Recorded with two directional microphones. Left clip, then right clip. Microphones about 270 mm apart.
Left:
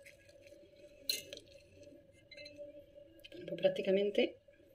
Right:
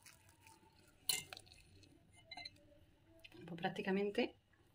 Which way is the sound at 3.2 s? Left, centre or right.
Centre.